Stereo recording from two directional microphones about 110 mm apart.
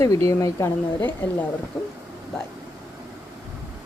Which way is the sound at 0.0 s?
30° left (ahead or behind).